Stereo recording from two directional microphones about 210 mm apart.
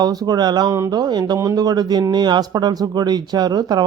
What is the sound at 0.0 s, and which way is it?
Speech, 20° right (ahead or behind).